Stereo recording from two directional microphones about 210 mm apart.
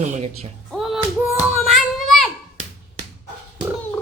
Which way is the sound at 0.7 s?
Centre (ahead or behind).